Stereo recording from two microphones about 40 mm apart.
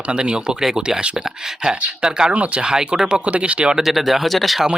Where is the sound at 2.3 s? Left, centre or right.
Right.